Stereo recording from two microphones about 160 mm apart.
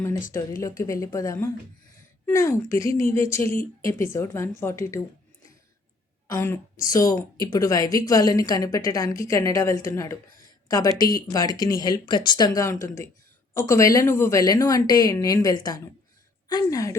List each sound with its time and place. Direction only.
0.6 s a woman's voice: 20° left (ahead or behind)
6.2 s speech: 20° left (ahead or behind)
12.8 s speech: 55° left (ahead or behind)
13.5 s speech: 20° left (ahead or behind)